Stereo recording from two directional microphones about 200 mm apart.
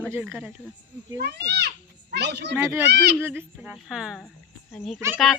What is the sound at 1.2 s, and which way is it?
A child's voice, 55° right (ahead or behind).